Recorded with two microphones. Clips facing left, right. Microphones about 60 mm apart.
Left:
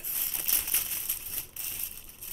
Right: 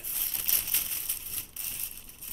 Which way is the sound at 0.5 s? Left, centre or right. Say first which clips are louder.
Left 1 dB; left.